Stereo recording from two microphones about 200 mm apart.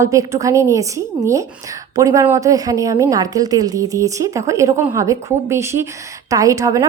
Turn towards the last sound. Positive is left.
turn(degrees=-15)  # may be behind; listen again after turning